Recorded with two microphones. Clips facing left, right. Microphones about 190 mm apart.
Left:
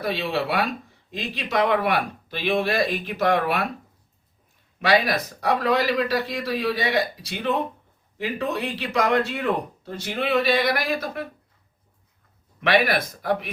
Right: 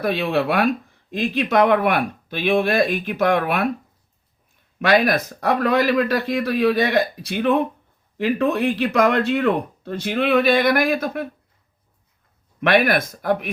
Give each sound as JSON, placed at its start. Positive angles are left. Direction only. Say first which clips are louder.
{"t": 0.0, "sound": "speech", "louder": "right 5 dB", "side_deg": -55}
{"t": 4.8, "sound": "speech", "louder": "right 4 dB", "side_deg": -50}
{"t": 12.6, "sound": "speech", "louder": "right 3 dB", "side_deg": -50}